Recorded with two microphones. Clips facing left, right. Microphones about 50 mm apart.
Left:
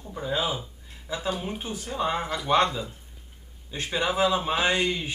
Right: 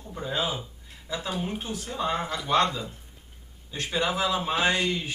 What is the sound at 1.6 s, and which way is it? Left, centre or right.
A man's voice, centre.